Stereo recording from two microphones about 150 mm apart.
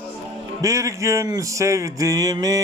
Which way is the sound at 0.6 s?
20° right (ahead or behind).